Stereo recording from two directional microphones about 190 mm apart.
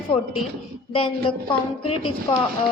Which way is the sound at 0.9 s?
30° left (ahead or behind).